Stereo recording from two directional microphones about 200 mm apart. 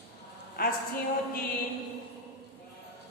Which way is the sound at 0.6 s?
45° left (ahead or behind).